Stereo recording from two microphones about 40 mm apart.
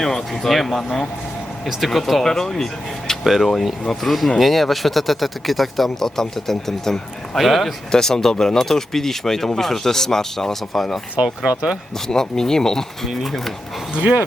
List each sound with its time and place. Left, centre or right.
0.0 s speech: centre
3.2 s speech: centre
7.9 s speech: centre
11.2 s speech: right
12.0 s speech: centre
13.1 s speech: centre
13.9 s speech: right